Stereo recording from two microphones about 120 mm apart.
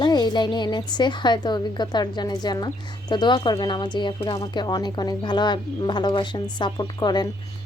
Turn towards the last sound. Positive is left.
turn(degrees=35)  # may be behind; listen again after turning